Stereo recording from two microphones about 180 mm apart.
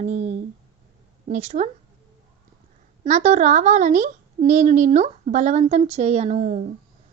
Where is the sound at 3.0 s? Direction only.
40° right (ahead or behind).